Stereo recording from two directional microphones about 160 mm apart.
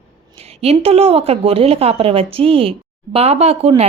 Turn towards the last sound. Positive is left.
turn(degrees=-40)  # may be behind; listen again after turning